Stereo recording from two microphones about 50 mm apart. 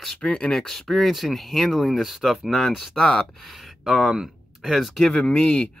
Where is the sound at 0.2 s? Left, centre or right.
Left.